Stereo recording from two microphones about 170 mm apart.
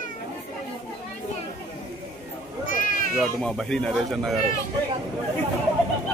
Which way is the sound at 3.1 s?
Centre (ahead or behind).